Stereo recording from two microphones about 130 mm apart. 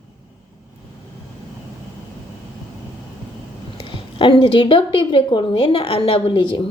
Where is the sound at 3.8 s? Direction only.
40° left (ahead or behind).